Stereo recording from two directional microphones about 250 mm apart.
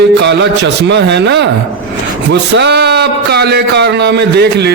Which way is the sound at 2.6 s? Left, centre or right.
Right.